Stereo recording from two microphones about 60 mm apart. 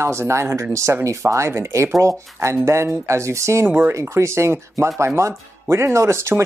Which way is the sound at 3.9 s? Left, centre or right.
Right.